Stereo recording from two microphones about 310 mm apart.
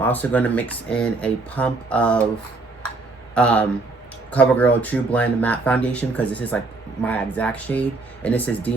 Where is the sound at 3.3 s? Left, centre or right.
Centre.